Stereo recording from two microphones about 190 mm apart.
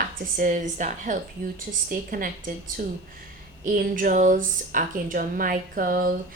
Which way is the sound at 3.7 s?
45° right (ahead or behind).